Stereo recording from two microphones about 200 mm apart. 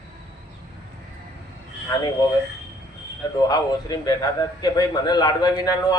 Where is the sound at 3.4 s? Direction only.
20° left (ahead or behind).